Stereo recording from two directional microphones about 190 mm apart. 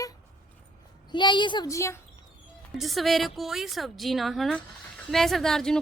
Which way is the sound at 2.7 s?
Centre (ahead or behind).